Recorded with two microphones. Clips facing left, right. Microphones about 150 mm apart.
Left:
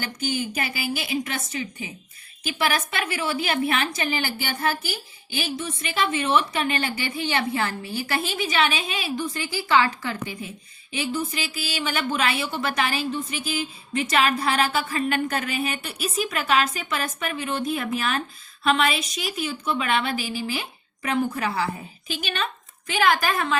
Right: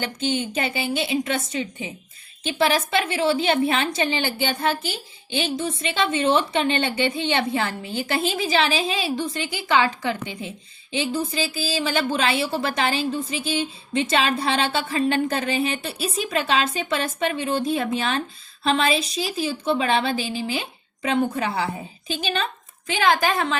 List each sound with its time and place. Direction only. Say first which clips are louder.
0.0 s a woman's voice: right 3 dB; 25° right (ahead or behind)